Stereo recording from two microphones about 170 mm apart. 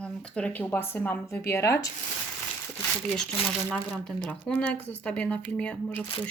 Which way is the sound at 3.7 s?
5° left (ahead or behind).